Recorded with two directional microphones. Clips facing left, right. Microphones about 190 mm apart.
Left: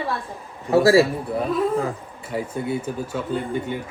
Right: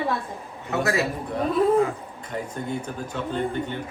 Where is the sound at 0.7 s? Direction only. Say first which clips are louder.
Left 10 dB; 35° left (ahead or behind).